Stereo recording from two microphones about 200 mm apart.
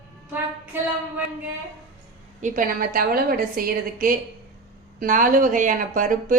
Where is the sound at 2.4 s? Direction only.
40° right (ahead or behind).